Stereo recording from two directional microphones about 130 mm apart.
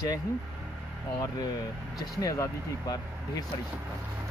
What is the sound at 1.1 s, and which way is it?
Speech, 30° left (ahead or behind).